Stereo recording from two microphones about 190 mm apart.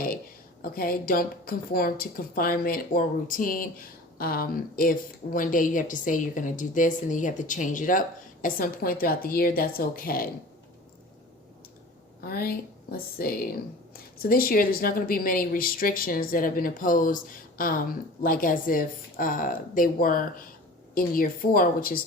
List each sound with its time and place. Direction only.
0.6 s a woman's voice: 50° left (ahead or behind)
12.2 s a woman's voice: 50° left (ahead or behind)